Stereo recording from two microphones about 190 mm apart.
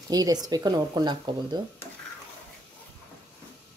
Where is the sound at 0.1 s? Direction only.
20° right (ahead or behind).